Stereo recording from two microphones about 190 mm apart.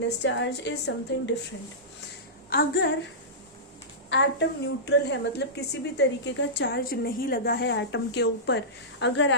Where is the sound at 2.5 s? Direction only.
55° left (ahead or behind).